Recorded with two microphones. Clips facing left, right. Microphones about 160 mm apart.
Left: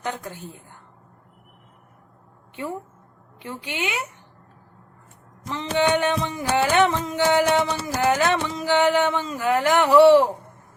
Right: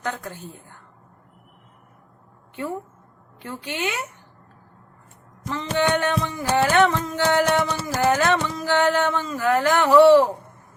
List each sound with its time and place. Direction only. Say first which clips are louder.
0.0 s speech: right 1 dB; 15° left (ahead or behind)
3.4 s speech: right 1 dB; 15° left (ahead or behind)
5.5 s speech: left 1 dB; 20° left (ahead or behind)